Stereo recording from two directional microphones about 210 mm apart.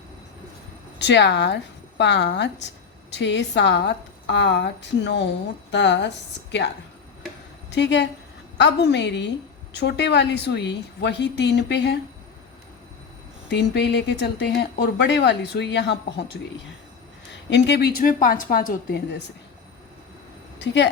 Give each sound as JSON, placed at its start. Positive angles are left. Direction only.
{"t": 0.9, "sound": "a woman's voice", "side_deg": 55}
{"t": 7.7, "sound": "a woman's voice", "side_deg": 55}
{"t": 13.5, "sound": "speech", "side_deg": 55}
{"t": 17.5, "sound": "a woman's voice", "side_deg": 55}
{"t": 20.6, "sound": "speech", "side_deg": 55}